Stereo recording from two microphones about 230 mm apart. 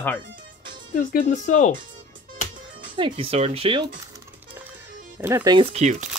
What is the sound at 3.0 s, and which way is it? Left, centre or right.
Speech, right.